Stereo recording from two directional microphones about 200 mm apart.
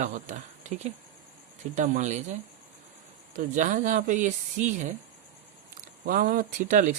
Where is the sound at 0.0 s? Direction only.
40° right (ahead or behind).